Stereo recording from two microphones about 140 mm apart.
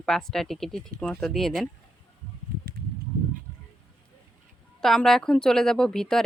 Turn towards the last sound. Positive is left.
turn(degrees=5)  # may be behind; listen again after turning